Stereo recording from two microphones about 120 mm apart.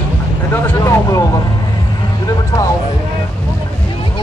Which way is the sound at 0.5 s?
25° left (ahead or behind).